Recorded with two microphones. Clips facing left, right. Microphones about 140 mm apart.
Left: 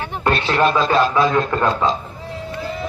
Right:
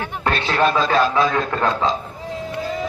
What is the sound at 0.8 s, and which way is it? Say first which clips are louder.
Speech: left 1 dB; 25° left (ahead or behind).